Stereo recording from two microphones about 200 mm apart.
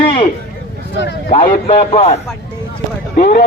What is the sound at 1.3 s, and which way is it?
Speech, 30° left (ahead or behind).